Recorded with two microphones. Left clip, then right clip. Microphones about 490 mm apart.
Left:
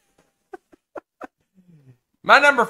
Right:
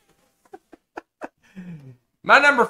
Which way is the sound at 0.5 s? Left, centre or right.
Left.